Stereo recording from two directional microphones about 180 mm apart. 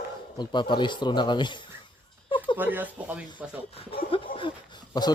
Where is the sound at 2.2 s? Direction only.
25° left (ahead or behind).